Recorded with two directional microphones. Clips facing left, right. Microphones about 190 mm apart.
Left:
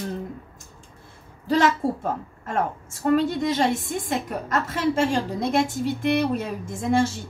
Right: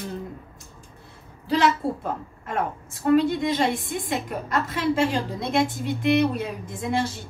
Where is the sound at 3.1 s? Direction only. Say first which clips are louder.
Right 1 dB; 45° left (ahead or behind).